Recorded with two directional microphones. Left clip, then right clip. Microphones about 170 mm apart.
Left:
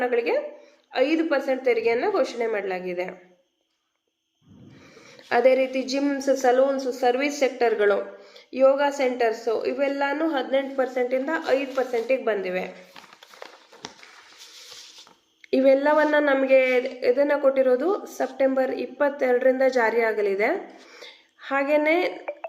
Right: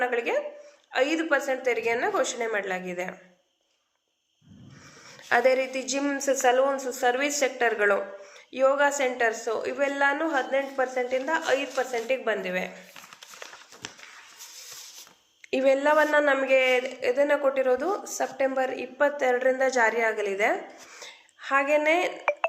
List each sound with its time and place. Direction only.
0.0 s speech: 15° left (ahead or behind)
5.3 s speech: 10° left (ahead or behind)
15.4 s speech: 15° left (ahead or behind)
21.0 s a sound: 15° left (ahead or behind)